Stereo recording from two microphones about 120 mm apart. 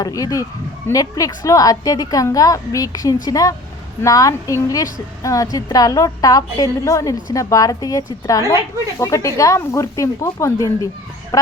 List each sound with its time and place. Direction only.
0.0 s a woman's voice: 30° left (ahead or behind)